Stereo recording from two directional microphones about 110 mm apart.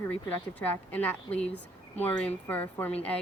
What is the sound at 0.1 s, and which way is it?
Speech, 15° left (ahead or behind).